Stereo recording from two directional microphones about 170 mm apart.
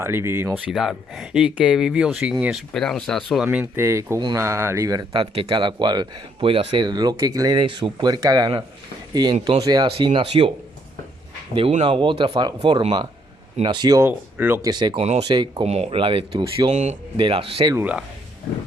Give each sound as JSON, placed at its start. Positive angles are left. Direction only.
{"t": 0.0, "sound": "speech", "side_deg": -15}
{"t": 11.8, "sound": "speech", "side_deg": -30}
{"t": 14.1, "sound": "speech", "side_deg": -10}
{"t": 15.6, "sound": "speech", "side_deg": -40}
{"t": 16.7, "sound": "speech", "side_deg": -45}
{"t": 17.2, "sound": "speech", "side_deg": -30}
{"t": 17.7, "sound": "speech", "side_deg": -10}